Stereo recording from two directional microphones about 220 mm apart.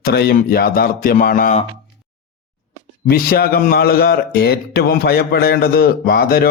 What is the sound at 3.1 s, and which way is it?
A man's voice, 45° left (ahead or behind).